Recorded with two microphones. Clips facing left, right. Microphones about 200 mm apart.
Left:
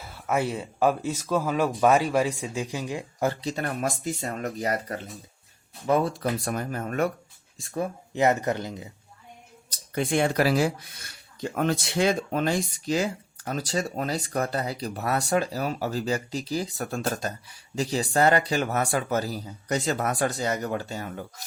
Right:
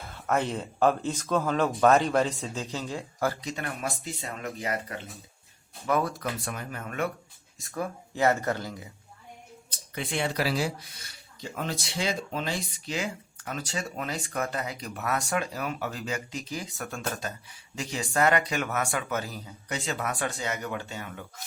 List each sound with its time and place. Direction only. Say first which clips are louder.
0.0 s speech: left 1 dB; 5° left (ahead or behind)
3.4 s speech: left 5 dB; 35° left (ahead or behind)
5.8 s speech: left 4 dB; 25° left (ahead or behind)
6.4 s speech: left 7 dB; 40° left (ahead or behind)
7.6 s speech: left 3 dB; 25° left (ahead or behind)
9.6 s speech: left 8 dB; 45° left (ahead or behind)